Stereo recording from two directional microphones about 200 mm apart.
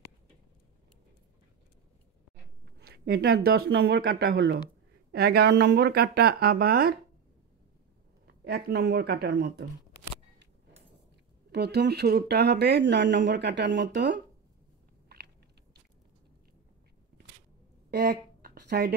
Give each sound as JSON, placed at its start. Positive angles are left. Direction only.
{"t": 2.6, "sound": "speech", "side_deg": -55}
{"t": 8.3, "sound": "speech", "side_deg": -50}
{"t": 11.5, "sound": "speech", "side_deg": -55}
{"t": 15.0, "sound": "biting", "side_deg": -55}
{"t": 17.9, "sound": "a sound", "side_deg": -50}